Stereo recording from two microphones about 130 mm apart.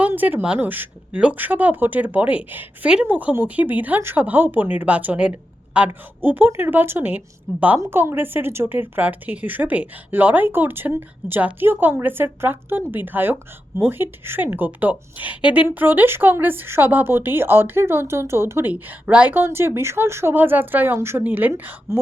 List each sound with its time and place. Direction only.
0.0 s a woman's voice: 15° right (ahead or behind)